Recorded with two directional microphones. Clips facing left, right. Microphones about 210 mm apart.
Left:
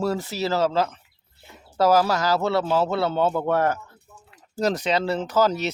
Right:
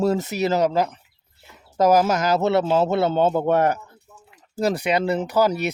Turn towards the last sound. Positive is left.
turn(degrees=-10)  # may be behind; listen again after turning